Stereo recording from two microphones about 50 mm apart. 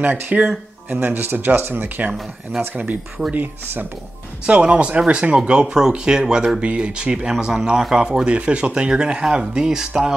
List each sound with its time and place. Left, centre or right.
0.0 s speech: right
4.5 s speech: right
6.6 s speech: right